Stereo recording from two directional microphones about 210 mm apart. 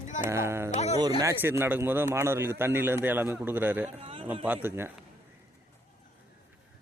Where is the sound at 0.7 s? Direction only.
30° left (ahead or behind).